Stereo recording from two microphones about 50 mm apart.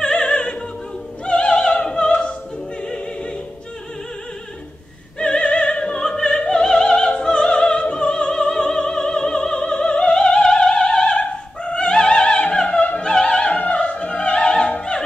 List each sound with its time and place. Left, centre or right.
0.0 s opera: centre
5.2 s opera: centre
13.0 s opera: centre